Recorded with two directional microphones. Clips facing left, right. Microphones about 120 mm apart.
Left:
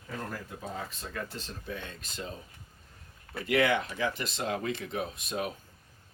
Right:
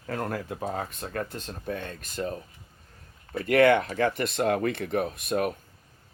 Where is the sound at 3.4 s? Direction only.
55° right (ahead or behind).